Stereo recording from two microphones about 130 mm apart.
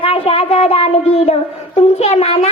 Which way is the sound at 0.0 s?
50° left (ahead or behind).